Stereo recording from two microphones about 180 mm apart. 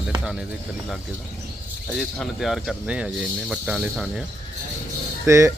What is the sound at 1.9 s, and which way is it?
Speech, centre (ahead or behind).